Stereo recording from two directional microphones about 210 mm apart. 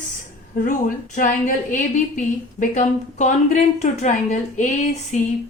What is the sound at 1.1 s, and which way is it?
A woman's voice, 40° left (ahead or behind).